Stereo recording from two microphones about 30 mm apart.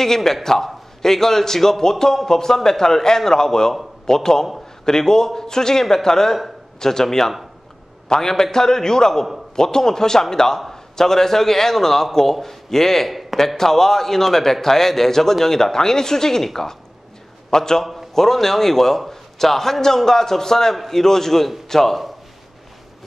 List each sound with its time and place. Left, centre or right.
0.0 s a man's voice: centre
13.1 s a sound: centre
13.6 s a man's voice: centre
17.5 s a man's voice: centre
17.9 s a man's voice: centre